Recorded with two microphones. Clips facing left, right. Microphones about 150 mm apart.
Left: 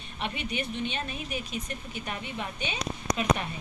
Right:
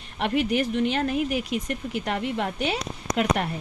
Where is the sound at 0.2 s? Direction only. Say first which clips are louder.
Right 10 dB; 85° right.